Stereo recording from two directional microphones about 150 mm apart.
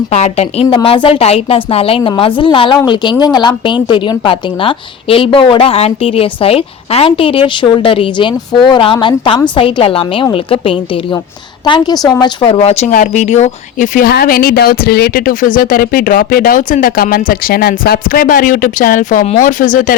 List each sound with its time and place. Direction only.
0.1 s a woman's voice: 45° left (ahead or behind)
0.7 s a woman's voice: 35° left (ahead or behind)
12.6 s a woman's voice: 45° left (ahead or behind)
12.9 s a woman's voice: 55° left (ahead or behind)